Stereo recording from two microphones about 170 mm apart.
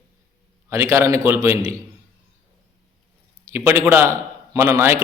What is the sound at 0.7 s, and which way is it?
Speech, 15° right (ahead or behind).